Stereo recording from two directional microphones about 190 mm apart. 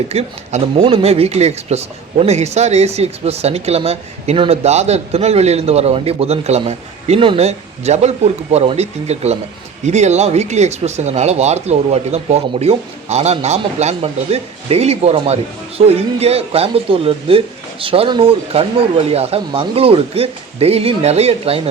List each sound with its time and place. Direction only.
0.1 s speech: 35° right (ahead or behind)